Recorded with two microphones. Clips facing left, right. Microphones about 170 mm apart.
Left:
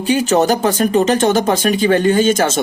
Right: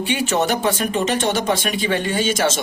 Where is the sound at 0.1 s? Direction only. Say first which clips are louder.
Left 7 dB; 40° left (ahead or behind).